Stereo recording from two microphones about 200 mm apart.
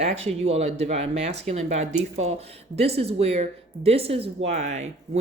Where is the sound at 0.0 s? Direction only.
30° right (ahead or behind).